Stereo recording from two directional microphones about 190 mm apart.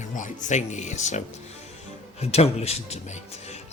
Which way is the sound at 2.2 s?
35° left (ahead or behind).